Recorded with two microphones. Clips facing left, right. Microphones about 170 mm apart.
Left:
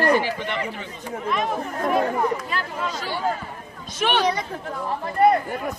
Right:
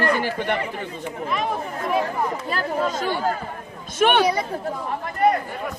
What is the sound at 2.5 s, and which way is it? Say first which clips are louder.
Speech: right 5 dB; 45° right (ahead or behind).